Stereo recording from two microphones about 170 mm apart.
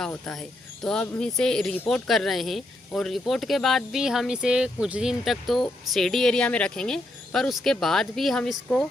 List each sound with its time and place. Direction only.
0.0 s speech: 5° left (ahead or behind)